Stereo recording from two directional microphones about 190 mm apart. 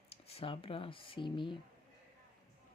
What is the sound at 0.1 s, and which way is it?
Speech, 30° left (ahead or behind).